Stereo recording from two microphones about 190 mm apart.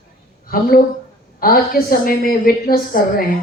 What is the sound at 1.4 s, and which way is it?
A woman's voice, 50° left (ahead or behind).